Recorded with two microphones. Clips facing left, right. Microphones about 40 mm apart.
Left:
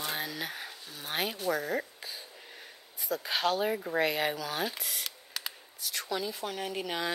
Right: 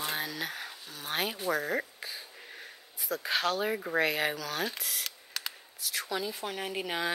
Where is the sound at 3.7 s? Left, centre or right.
Centre.